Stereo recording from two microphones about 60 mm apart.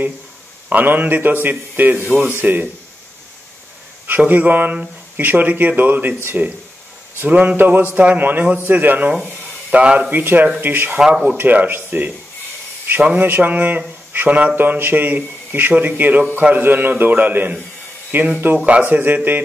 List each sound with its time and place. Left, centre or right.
0.7 s speech: right
4.3 s speech: right
11.0 s speech: centre
11.3 s speech: right
13.2 s speech: right